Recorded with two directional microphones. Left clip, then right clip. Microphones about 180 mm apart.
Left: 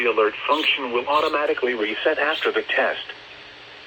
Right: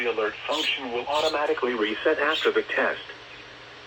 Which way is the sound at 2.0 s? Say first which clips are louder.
Left 2 dB; 45° right (ahead or behind).